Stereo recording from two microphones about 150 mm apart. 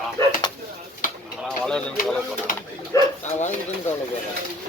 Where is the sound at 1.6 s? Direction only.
5° left (ahead or behind).